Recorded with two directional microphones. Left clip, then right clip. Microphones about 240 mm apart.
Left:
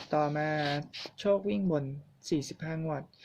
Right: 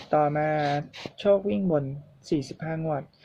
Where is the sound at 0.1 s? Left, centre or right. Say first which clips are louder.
Right 7 dB; centre.